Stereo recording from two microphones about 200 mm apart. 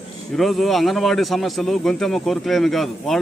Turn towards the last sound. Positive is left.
turn(degrees=0)  # may be behind; listen again after turning